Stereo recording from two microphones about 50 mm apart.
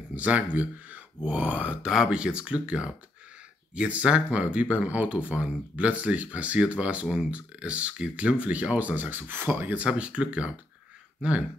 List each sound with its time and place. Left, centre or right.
0.1 s speech: right
1.9 s speech: centre; by 9.8 s right
9.8 s speech: right